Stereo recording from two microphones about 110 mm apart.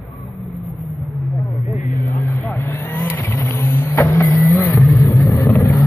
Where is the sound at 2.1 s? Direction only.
25° left (ahead or behind).